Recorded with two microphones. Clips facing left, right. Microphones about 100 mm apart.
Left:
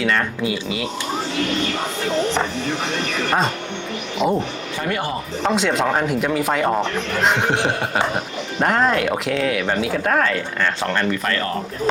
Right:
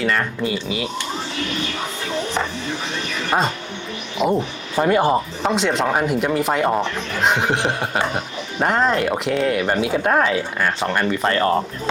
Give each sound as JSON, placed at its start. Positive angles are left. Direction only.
{"t": 0.0, "sound": "speech", "side_deg": 0}
{"t": 4.2, "sound": "speech", "side_deg": -5}
{"t": 4.8, "sound": "speech", "side_deg": -30}
{"t": 5.4, "sound": "speech", "side_deg": -5}
{"t": 10.0, "sound": "speech", "side_deg": -15}
{"t": 11.2, "sound": "speech", "side_deg": -30}